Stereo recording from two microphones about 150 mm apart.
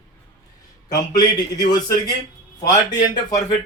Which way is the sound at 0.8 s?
25° left (ahead or behind).